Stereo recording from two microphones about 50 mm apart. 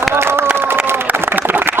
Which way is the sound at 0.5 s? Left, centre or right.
Right.